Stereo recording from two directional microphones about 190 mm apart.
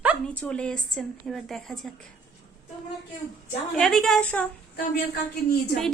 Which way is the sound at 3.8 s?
Centre (ahead or behind).